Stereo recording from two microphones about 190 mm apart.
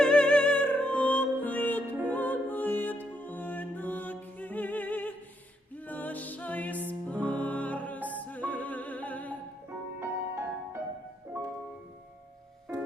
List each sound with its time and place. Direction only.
0.0 s music: 5° left (ahead or behind)
9.6 s music: 10° right (ahead or behind)